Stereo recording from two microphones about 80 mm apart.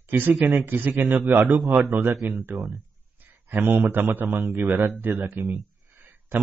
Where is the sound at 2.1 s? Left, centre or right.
Centre.